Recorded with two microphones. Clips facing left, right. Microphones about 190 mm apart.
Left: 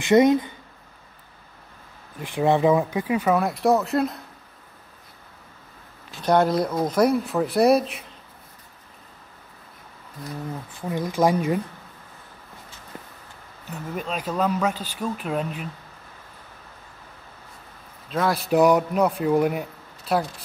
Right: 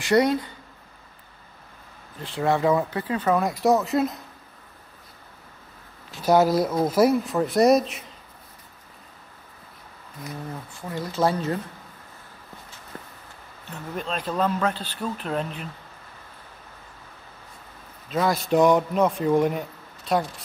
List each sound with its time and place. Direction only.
0.0 s speech: 20° left (ahead or behind)
2.2 s speech: 15° left (ahead or behind); by 4.2 s centre (ahead or behind)
6.2 s speech: 5° right (ahead or behind)
10.9 s speech: 15° left (ahead or behind)
12.9 s a sound: 15° left (ahead or behind)
13.7 s speech: 5° left (ahead or behind)
18.1 s speech: centre (ahead or behind)